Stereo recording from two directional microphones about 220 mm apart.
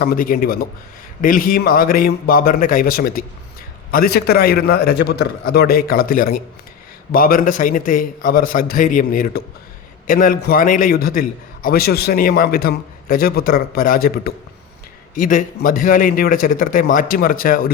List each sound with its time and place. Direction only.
0.0 s a man's voice: 40° left (ahead or behind)